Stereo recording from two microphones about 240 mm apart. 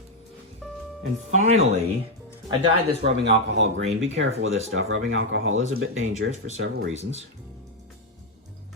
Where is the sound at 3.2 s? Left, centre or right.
Right.